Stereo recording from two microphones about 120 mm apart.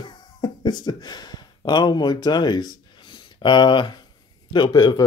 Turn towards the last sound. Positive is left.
turn(degrees=35)  # may be behind; listen again after turning